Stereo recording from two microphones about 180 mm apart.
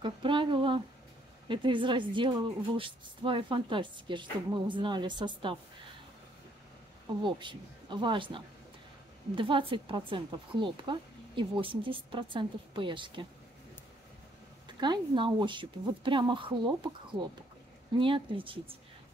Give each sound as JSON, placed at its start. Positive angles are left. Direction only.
{"t": 0.0, "sound": "speech", "side_deg": -25}
{"t": 7.2, "sound": "speech", "side_deg": -25}
{"t": 14.7, "sound": "speech", "side_deg": -25}